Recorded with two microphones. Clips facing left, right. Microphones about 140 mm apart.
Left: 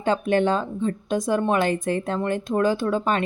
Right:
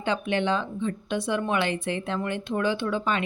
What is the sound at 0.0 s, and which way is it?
A woman's voice, 45° left (ahead or behind).